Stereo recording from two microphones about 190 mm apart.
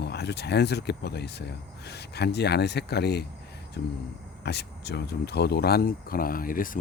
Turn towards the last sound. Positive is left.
turn(degrees=45)  # may be behind; listen again after turning